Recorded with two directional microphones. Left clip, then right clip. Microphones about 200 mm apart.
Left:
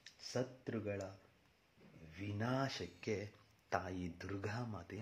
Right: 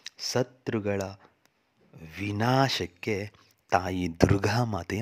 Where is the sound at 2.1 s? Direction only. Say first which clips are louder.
Right 16 dB; 55° right (ahead or behind).